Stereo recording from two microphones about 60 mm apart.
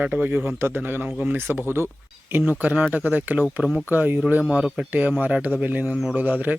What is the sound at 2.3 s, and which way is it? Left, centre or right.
Speech, right.